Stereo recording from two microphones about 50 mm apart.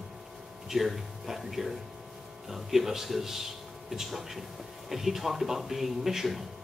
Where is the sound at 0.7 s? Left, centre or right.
Centre.